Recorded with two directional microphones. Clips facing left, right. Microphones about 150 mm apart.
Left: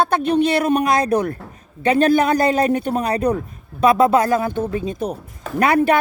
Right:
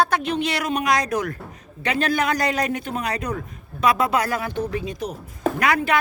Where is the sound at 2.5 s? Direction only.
35° left (ahead or behind).